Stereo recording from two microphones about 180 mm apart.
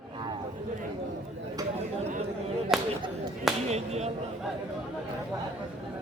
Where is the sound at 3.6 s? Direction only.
35° right (ahead or behind).